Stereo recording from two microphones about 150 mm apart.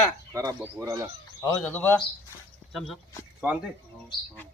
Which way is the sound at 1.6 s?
10° left (ahead or behind).